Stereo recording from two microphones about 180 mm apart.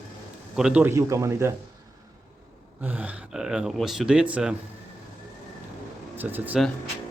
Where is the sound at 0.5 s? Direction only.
5° right (ahead or behind).